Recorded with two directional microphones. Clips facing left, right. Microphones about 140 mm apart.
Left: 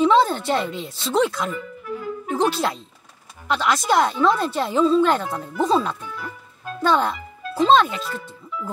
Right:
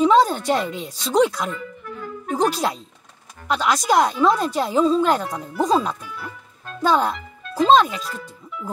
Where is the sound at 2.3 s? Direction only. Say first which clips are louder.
Right 1 dB; 40° right (ahead or behind).